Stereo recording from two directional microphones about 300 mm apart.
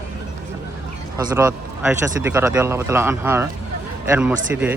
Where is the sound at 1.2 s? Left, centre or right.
Centre.